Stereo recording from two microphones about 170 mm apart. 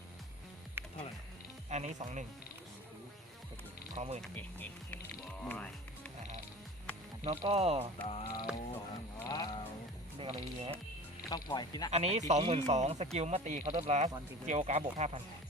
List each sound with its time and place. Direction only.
0.8 s music: 10° right (ahead or behind)
1.7 s speech: 45° right (ahead or behind)
3.9 s speech: 40° right (ahead or behind)
4.2 s speech: 10° left (ahead or behind)
5.5 s music: 10° left (ahead or behind)
7.3 s speech: 40° right (ahead or behind)
8.0 s speech: 35° left (ahead or behind)
8.5 s mechanisms: 5° right (ahead or behind)
9.2 s a sound: 25° left (ahead or behind)
10.2 s speech: 35° right (ahead or behind)
11.3 s speech: 25° left (ahead or behind)
11.9 s speech: 40° right (ahead or behind)